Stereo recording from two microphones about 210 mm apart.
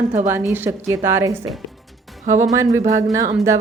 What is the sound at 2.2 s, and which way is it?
Speech, 35° right (ahead or behind).